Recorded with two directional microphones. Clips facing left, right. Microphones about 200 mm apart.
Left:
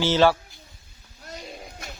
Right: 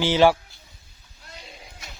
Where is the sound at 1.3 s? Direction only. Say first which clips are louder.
Left 6 dB; 45° left (ahead or behind).